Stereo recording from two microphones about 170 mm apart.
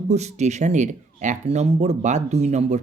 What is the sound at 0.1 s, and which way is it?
Speech, 40° right (ahead or behind).